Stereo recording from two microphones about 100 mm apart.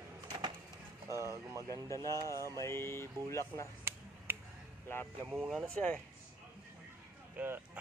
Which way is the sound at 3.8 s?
20° right (ahead or behind).